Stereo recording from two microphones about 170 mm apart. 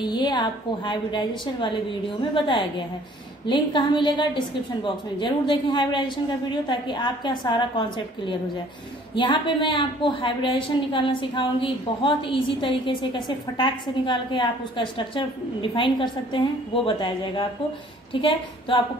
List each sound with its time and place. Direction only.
0.0 s a woman's voice: 25° left (ahead or behind)